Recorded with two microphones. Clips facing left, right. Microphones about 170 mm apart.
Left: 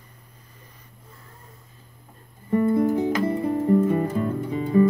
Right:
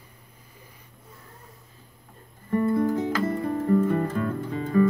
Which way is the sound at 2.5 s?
15° left (ahead or behind).